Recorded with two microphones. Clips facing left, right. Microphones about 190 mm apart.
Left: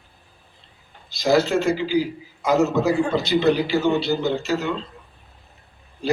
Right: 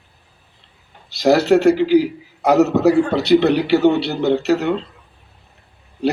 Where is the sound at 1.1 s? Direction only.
65° right (ahead or behind).